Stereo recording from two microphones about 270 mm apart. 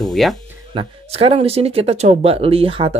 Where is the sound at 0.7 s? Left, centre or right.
Right.